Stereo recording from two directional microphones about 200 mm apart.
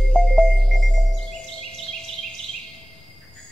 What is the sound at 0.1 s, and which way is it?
Music, centre (ahead or behind).